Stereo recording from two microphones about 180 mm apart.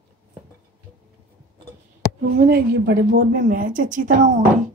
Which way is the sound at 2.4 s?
60° right (ahead or behind).